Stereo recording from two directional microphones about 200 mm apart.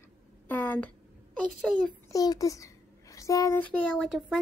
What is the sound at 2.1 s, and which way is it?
A child's voice, 15° left (ahead or behind).